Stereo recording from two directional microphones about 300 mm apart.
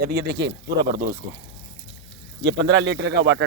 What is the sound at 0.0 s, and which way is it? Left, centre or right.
Speech, right.